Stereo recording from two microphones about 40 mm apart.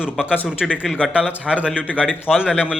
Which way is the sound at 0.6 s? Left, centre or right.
Centre.